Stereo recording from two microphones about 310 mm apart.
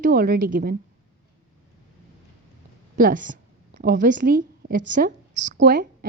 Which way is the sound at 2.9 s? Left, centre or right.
Right.